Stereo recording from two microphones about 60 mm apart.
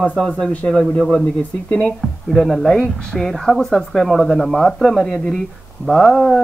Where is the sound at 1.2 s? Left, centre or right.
Left.